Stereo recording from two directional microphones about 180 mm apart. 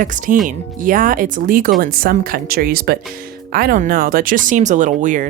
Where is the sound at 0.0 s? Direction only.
45° right (ahead or behind).